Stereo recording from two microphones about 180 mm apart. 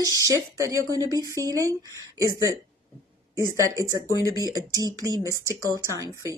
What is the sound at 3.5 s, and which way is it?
Speech, 20° right (ahead or behind).